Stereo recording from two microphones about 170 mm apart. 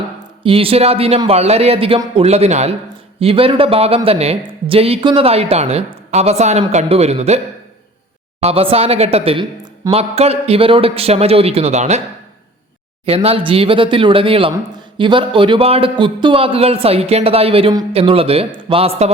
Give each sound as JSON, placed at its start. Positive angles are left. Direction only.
{"t": 0.4, "sound": "a woman's voice", "side_deg": -35}
{"t": 13.1, "sound": "a woman's voice", "side_deg": -35}